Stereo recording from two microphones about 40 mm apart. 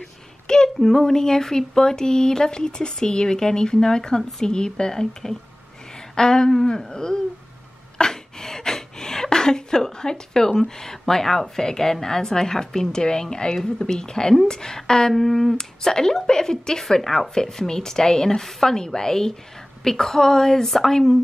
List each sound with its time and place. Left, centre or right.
0.7 s speech: centre
5.9 s a sound: centre
6.9 s speech: centre
15.5 s speech: centre